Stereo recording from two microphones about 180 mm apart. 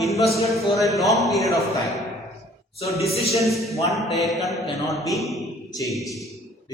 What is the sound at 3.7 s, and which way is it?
Speech, 20° left (ahead or behind).